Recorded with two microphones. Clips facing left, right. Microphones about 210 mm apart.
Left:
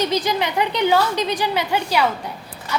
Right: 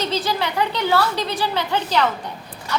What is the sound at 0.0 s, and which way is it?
A woman's voice, 15° left (ahead or behind).